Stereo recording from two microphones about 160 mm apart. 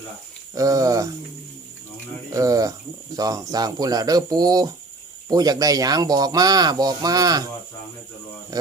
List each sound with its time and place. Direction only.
0.5 s speech: 20° right (ahead or behind)
2.3 s speech: 20° right (ahead or behind)